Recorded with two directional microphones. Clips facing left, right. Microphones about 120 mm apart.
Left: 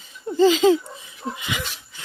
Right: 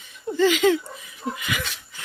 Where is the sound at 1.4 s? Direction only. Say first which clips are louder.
Left 1 dB; 25° left (ahead or behind).